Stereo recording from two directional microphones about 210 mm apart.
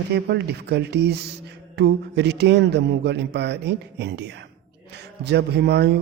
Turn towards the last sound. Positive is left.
turn(degrees=-55)  # may be behind; listen again after turning